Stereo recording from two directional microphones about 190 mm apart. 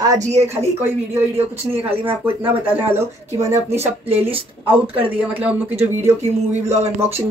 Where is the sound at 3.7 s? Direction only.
35° right (ahead or behind).